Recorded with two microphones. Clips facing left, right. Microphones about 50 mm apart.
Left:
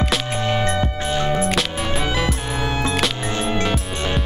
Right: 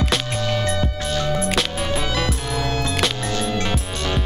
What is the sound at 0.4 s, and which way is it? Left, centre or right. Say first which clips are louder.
Music: left 2 dB; left.